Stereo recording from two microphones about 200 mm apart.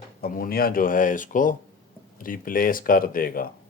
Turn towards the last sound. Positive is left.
turn(degrees=45)  # may be behind; listen again after turning